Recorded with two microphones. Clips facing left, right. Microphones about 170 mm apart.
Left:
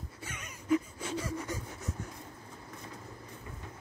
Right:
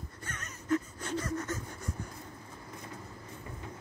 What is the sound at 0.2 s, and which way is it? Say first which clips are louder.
Gasp: right 1 dB; 10° left (ahead or behind).